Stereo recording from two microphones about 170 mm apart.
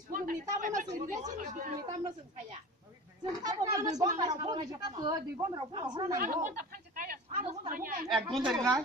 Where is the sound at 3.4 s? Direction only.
20° right (ahead or behind).